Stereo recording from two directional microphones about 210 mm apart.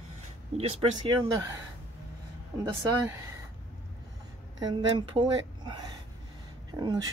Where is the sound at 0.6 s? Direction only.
25° right (ahead or behind).